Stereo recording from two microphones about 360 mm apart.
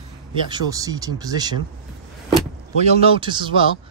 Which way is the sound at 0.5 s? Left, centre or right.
Centre.